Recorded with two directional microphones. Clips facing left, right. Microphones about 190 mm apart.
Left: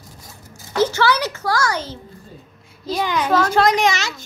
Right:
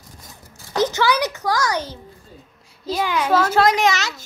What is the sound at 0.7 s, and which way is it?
A child's voice, 15° right (ahead or behind).